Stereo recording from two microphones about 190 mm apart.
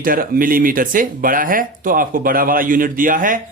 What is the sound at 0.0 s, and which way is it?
Speech, 45° right (ahead or behind).